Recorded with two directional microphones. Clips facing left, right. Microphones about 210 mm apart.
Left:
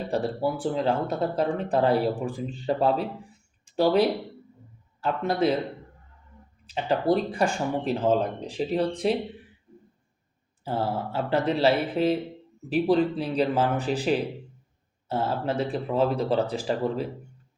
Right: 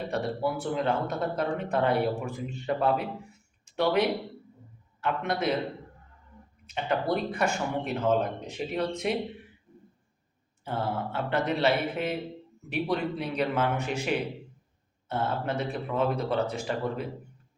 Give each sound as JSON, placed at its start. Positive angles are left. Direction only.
{"t": 0.1, "sound": "a man's voice", "side_deg": 30}
{"t": 6.7, "sound": "speech", "side_deg": 35}
{"t": 10.6, "sound": "speech", "side_deg": 35}